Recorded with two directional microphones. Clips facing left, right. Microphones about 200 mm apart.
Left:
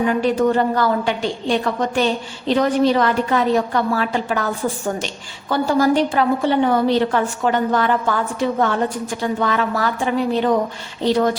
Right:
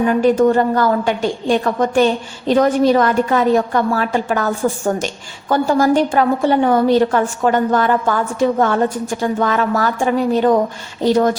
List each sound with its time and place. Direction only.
0.1 s a woman's voice: 45° right (ahead or behind)